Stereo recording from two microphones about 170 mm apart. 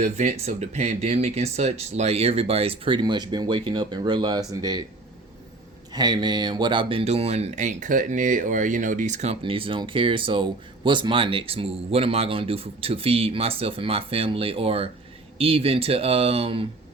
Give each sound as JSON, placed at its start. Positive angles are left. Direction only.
{"t": 0.0, "sound": "speech", "side_deg": -40}
{"t": 5.9, "sound": "speech", "side_deg": -25}